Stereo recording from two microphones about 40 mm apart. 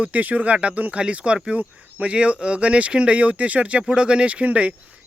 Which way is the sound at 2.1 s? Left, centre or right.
Right.